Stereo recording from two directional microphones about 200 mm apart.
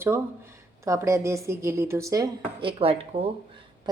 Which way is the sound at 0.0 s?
10° right (ahead or behind).